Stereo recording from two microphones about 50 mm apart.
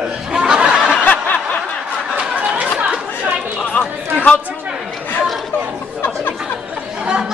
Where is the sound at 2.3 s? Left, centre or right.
Right.